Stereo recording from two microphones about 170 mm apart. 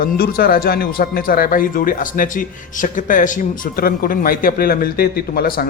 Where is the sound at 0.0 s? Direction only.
60° left (ahead or behind).